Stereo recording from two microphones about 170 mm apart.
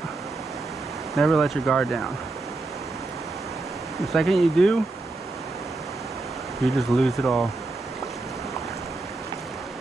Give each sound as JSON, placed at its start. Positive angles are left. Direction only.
{"t": 1.1, "sound": "speech", "side_deg": 0}
{"t": 4.0, "sound": "speech", "side_deg": 0}
{"t": 6.6, "sound": "speech", "side_deg": 0}